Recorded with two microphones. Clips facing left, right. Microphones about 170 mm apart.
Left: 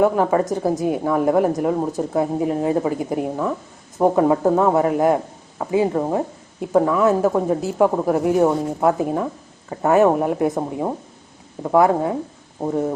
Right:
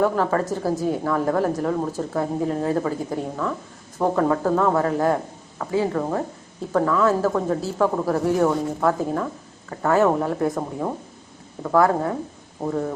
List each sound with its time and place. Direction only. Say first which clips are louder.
0.0 s a woman's voice: left 4 dB; 15° left (ahead or behind)